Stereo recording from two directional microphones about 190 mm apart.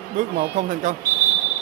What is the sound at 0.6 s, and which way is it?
Speech, 45° right (ahead or behind).